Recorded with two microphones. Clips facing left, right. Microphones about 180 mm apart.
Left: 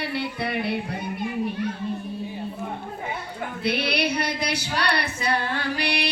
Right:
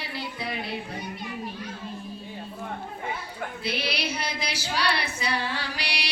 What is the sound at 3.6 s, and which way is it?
Female singing, 60° left (ahead or behind).